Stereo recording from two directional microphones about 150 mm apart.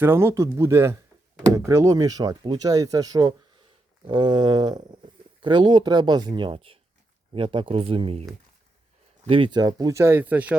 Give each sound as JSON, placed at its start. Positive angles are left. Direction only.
{"t": 0.0, "sound": "speech", "side_deg": -15}